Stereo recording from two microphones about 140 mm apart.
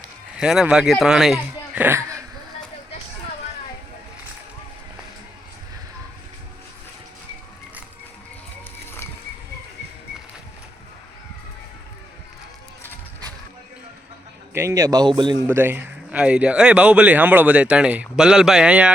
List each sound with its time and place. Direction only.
0.3 s speech: 5° right (ahead or behind); by 2.2 s 20° right (ahead or behind)
14.5 s a man's voice: 20° right (ahead or behind)
15.4 s speech: 15° right (ahead or behind)